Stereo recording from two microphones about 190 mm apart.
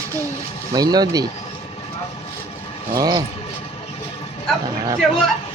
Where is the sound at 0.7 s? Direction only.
20° right (ahead or behind).